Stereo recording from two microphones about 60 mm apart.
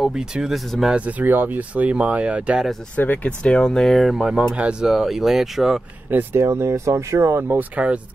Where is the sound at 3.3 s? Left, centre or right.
Centre.